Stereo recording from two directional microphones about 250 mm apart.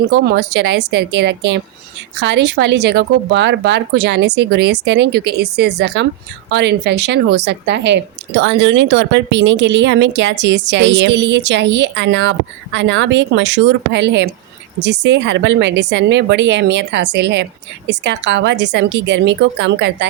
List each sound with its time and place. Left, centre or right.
0.1 s a woman's voice: right